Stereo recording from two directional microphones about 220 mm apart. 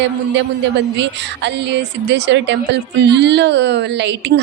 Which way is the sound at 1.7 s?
55° right (ahead or behind).